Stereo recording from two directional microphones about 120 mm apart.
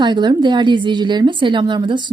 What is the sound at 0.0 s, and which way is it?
A woman's voice, 40° right (ahead or behind).